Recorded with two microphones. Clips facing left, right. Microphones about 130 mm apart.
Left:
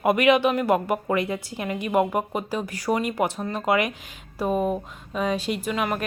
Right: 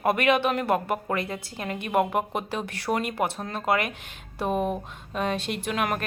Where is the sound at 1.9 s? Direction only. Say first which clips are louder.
Left 1 dB; centre (ahead or behind).